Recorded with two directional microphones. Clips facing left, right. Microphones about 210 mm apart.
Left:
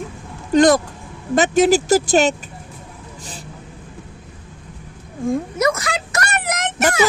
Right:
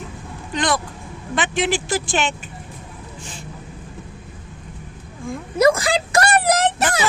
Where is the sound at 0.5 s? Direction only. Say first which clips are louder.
Left 10 dB; 45° left (ahead or behind).